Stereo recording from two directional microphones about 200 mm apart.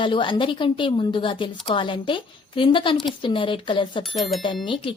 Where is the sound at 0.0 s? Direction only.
25° left (ahead or behind).